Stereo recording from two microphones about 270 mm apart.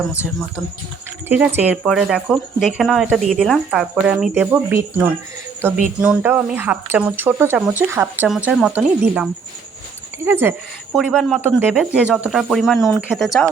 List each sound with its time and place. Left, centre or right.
1.3 s speech: centre